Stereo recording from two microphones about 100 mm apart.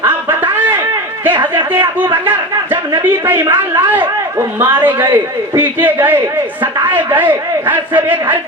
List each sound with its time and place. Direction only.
1.3 s speech: 50° right (ahead or behind)
3.0 s a man's voice: 20° right (ahead or behind)